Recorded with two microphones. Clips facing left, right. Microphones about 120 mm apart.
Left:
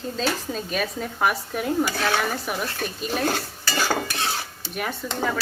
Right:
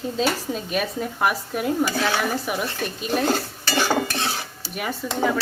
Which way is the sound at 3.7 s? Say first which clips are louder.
Right 3 dB; 20° right (ahead or behind).